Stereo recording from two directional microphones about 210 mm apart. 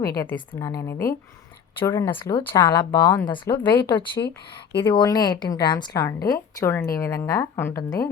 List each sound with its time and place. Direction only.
0.0 s a woman's voice: 15° left (ahead or behind)